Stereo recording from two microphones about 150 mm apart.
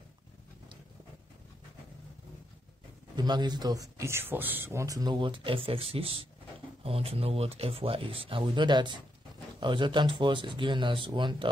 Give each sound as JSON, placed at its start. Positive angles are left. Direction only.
{"t": 3.2, "sound": "speech", "side_deg": -30}